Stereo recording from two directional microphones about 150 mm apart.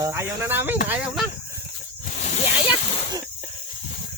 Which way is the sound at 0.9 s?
Centre (ahead or behind).